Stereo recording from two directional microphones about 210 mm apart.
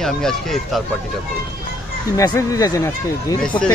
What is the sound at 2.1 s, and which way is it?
Speech, 15° left (ahead or behind).